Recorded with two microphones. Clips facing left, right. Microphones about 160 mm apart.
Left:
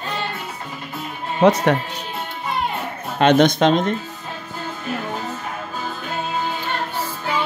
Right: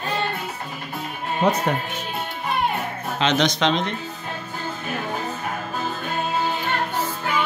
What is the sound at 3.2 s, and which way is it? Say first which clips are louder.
Speech: left 7 dB; 55° left (ahead or behind).